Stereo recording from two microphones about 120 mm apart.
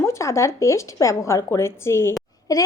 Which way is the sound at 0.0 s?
25° left (ahead or behind).